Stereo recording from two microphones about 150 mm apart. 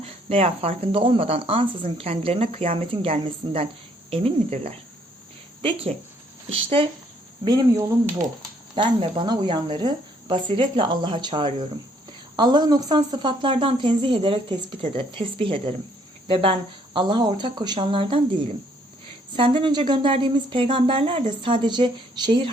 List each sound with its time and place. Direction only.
0.0 s speech: 40° right (ahead or behind)
6.5 s speech: 40° right (ahead or behind)
7.4 s speech: 25° right (ahead or behind)
19.4 s speech: 35° right (ahead or behind)